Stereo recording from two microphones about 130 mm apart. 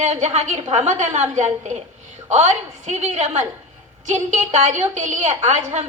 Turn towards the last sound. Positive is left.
turn(degrees=-65)  # may be behind; listen again after turning